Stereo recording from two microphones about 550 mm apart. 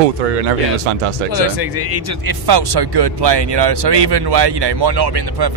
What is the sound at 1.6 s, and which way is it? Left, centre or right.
Speech, right.